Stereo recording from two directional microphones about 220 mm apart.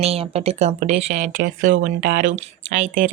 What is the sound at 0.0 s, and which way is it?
Speech, 25° right (ahead or behind).